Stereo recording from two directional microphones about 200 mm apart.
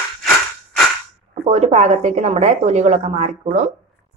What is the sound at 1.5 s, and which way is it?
A woman's voice, 35° right (ahead or behind).